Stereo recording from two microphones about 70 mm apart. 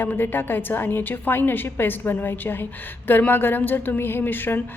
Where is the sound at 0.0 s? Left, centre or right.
Left.